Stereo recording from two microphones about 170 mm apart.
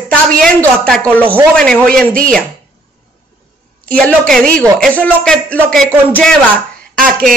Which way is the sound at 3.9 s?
5° left (ahead or behind).